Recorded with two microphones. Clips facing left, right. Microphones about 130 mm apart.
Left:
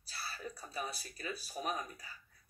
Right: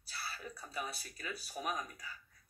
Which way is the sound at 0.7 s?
30° left (ahead or behind).